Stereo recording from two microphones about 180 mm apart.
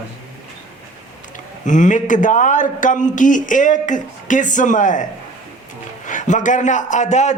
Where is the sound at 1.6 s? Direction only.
45° left (ahead or behind).